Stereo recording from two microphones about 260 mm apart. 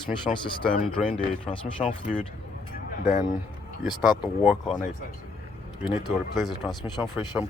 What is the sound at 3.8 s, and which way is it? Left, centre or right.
Speech, centre.